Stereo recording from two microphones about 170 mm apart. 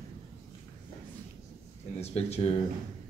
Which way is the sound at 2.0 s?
40° left (ahead or behind).